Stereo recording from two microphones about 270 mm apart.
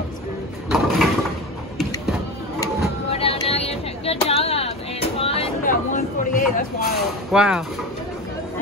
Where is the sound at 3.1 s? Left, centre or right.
Left.